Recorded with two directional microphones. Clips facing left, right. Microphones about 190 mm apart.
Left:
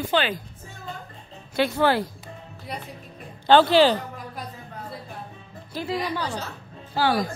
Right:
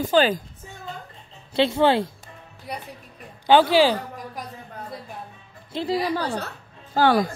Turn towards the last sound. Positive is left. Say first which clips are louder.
# right 4 dB
turn(degrees=-55)  # may be behind; listen again after turning